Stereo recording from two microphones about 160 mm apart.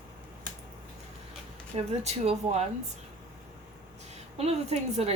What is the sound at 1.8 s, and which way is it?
Speech, 40° right (ahead or behind).